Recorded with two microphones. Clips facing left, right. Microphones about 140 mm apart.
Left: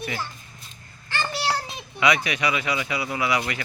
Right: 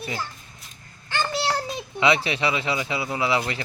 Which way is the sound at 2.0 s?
30° right (ahead or behind).